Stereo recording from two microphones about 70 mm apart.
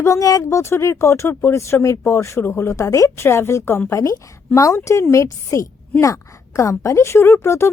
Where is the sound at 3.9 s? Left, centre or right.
Left.